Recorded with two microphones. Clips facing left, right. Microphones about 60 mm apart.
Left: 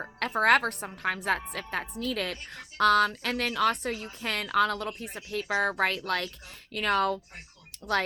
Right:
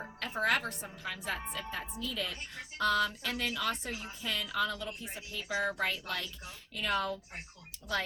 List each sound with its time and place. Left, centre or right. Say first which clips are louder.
0.2 s a woman's voice: left 8 dB; left